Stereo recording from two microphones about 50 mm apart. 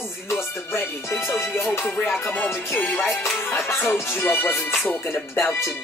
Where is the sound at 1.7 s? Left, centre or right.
Left.